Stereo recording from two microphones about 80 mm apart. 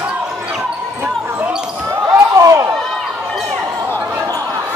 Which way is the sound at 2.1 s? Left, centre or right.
Right.